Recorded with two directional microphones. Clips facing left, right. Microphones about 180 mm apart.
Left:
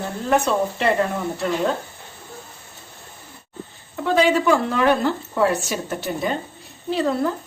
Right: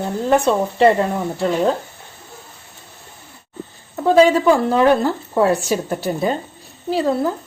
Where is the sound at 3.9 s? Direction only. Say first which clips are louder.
Right 5 dB; 40° right (ahead or behind).